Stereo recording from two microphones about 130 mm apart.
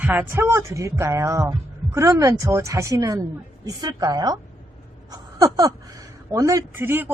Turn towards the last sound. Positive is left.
turn(degrees=-15)  # may be behind; listen again after turning